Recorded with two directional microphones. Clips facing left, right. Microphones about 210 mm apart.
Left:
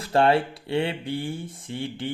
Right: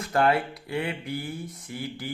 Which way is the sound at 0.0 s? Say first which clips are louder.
Left 3 dB; 30° left (ahead or behind).